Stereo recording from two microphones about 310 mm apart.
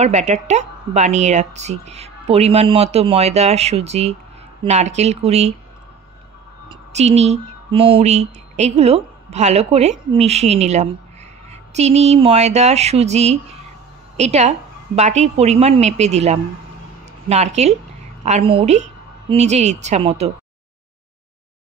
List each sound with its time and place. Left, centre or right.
0.0 s speech: right
6.7 s a woman's voice: right